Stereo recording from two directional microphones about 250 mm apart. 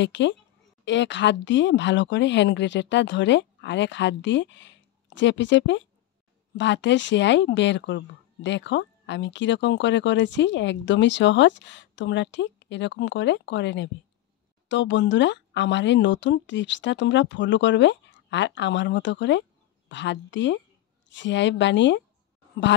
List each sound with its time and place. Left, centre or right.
0.0 s speech: left